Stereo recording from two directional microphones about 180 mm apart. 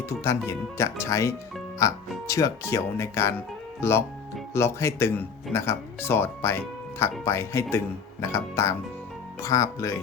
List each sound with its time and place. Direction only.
0.0 s speech: 15° left (ahead or behind)